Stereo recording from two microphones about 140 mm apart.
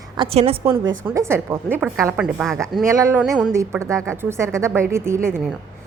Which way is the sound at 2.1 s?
5° right (ahead or behind).